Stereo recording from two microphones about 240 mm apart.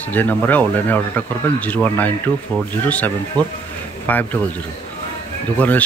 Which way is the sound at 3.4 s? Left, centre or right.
Centre.